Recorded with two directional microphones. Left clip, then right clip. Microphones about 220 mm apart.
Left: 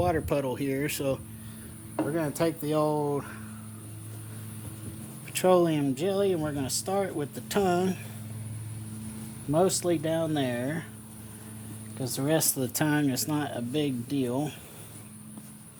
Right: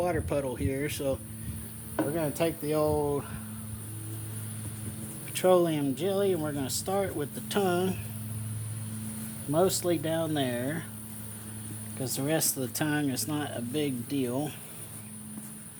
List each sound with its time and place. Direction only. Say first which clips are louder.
0.0 s speech: left 2 dB; 35° left (ahead or behind)
5.3 s speech: left 1 dB; 30° left (ahead or behind)
9.5 s speech: left 1 dB; 25° left (ahead or behind)
11.9 s speech: left 2 dB; 25° left (ahead or behind)